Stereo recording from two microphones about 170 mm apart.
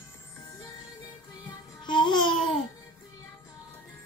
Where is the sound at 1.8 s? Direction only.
25° left (ahead or behind).